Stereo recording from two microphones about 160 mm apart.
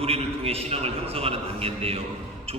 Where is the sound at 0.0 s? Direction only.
40° right (ahead or behind).